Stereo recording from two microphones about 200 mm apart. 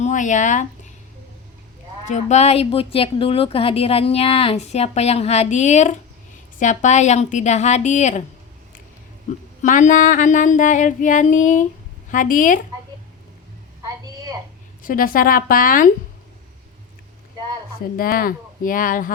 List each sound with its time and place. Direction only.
0.0 s a woman's voice: 40° left (ahead or behind)
2.0 s a woman's voice: 35° left (ahead or behind)
9.6 s a woman's voice: 40° left (ahead or behind)
13.8 s a sound: 20° right (ahead or behind)
14.8 s speech: 45° left (ahead or behind)
17.7 s speech: 50° left (ahead or behind)